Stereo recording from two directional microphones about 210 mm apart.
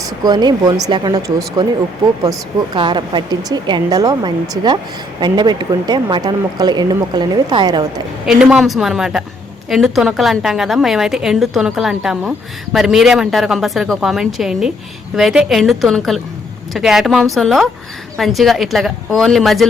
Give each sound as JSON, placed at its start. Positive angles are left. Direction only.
{"t": 0.2, "sound": "speech", "side_deg": -20}
{"t": 2.7, "sound": "speech", "side_deg": -20}
{"t": 8.3, "sound": "a woman's voice", "side_deg": -5}